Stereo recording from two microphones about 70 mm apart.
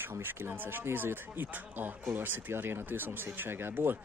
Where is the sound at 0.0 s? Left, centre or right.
Right.